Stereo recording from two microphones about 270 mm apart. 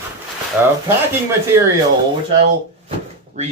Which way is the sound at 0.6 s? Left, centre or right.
Centre.